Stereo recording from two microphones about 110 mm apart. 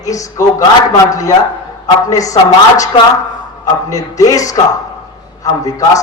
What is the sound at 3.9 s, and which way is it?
Speech, 30° left (ahead or behind).